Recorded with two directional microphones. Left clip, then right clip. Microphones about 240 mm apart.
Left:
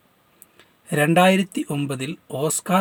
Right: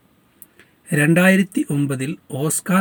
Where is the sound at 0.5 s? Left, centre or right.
Centre.